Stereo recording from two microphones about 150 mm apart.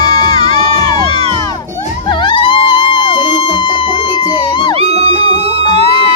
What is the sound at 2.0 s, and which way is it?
Music, 30° left (ahead or behind).